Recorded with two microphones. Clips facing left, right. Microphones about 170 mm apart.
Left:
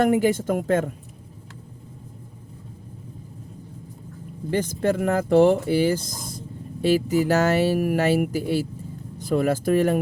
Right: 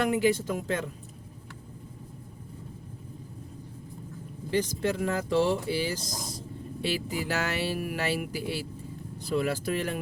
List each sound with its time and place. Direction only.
0.0 s speech: 50° left (ahead or behind)
4.5 s speech: 50° left (ahead or behind)
6.8 s speech: 45° left (ahead or behind)